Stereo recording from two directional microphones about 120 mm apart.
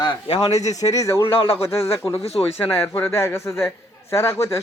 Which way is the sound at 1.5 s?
55° left (ahead or behind).